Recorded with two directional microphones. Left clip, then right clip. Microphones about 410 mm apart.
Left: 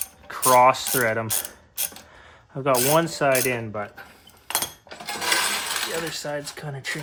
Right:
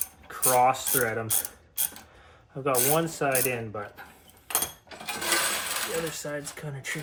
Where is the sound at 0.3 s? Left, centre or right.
Left.